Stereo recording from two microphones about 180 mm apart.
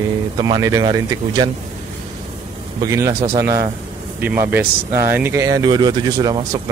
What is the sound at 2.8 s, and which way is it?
Speech, 15° right (ahead or behind).